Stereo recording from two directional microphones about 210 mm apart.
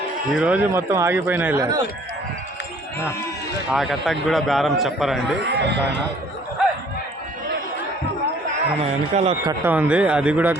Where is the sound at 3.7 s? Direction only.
Centre (ahead or behind).